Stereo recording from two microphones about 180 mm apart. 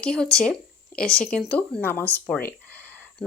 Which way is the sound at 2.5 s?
10° left (ahead or behind).